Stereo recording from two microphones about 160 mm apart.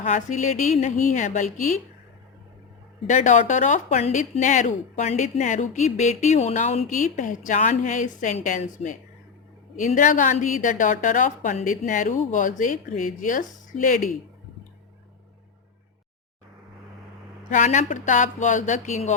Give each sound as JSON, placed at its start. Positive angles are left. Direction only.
{"t": 0.0, "sound": "speech", "side_deg": 50}
{"t": 3.1, "sound": "speech", "side_deg": 50}
{"t": 17.5, "sound": "speech", "side_deg": 50}